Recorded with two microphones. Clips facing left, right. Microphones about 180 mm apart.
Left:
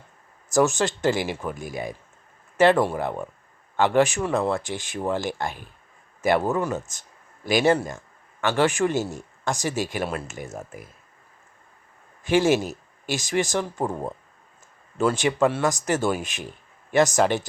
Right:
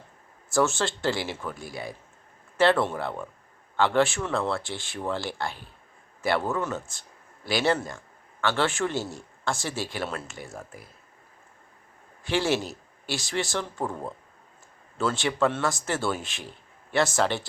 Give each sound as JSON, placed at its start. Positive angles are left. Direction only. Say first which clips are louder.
{"t": 0.5, "sound": "a man's voice", "louder": "left 4 dB", "side_deg": 15}
{"t": 12.3, "sound": "a man's voice", "louder": "left 6 dB", "side_deg": 15}